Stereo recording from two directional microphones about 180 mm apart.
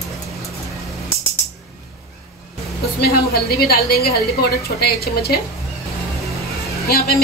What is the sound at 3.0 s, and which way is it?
A woman's voice, 60° left (ahead or behind).